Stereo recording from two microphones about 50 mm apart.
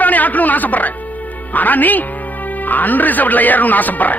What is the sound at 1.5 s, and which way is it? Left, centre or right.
Speech, left.